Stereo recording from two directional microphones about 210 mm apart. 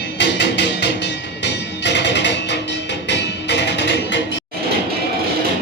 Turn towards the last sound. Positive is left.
turn(degrees=55)  # may be behind; listen again after turning